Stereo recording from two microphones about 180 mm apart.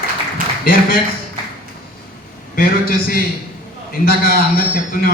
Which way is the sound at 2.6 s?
55° left (ahead or behind).